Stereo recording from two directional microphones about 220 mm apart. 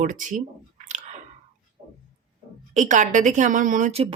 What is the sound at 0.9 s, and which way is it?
Chewing, 30° right (ahead or behind).